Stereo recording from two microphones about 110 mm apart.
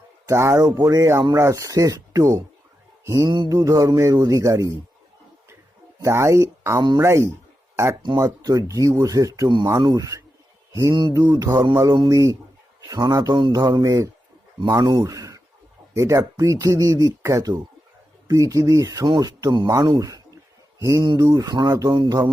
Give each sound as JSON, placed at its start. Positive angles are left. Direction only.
{"t": 0.3, "sound": "speech", "side_deg": -25}
{"t": 6.0, "sound": "speech", "side_deg": -25}
{"t": 8.0, "sound": "a man's voice", "side_deg": -35}